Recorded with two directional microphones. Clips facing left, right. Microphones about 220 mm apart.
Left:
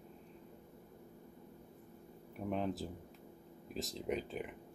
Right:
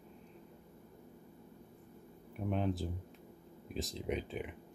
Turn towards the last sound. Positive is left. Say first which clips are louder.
# right 1 dB
turn(degrees=0)  # may be behind; listen again after turning